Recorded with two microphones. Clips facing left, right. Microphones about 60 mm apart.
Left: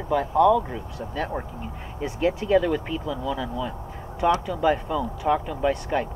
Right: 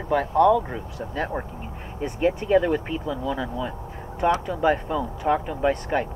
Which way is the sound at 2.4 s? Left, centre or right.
Right.